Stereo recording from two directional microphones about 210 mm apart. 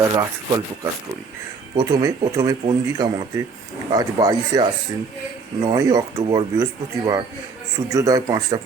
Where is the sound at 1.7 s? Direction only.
20° right (ahead or behind).